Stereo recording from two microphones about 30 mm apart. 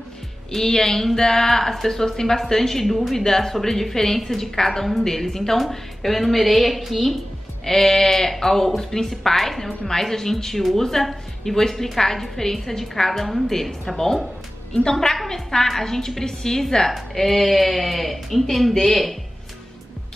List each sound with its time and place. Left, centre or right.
0.5 s speech: centre
5.6 s speech: centre
7.6 s a woman's voice: centre
16.9 s speech: centre